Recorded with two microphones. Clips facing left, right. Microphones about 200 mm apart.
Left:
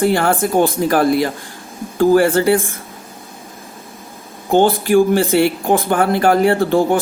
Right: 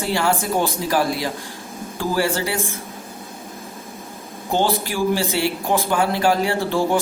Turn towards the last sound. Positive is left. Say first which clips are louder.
# left 5 dB
turn(degrees=55)  # may be behind; listen again after turning